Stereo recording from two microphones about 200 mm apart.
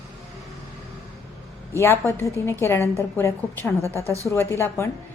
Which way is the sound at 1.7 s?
15° left (ahead or behind).